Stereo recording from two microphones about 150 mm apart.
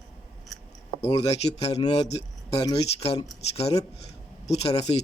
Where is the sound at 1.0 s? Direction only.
45° left (ahead or behind).